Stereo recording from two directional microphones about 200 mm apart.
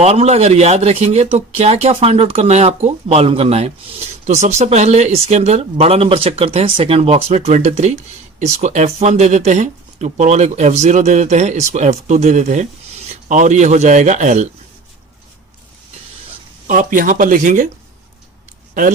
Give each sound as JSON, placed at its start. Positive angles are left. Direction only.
{"t": 0.0, "sound": "speech", "side_deg": -30}
{"t": 16.6, "sound": "speech", "side_deg": -40}
{"t": 18.7, "sound": "speech", "side_deg": -40}